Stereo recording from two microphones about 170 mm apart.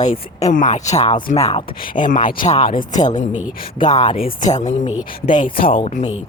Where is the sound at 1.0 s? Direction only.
30° left (ahead or behind).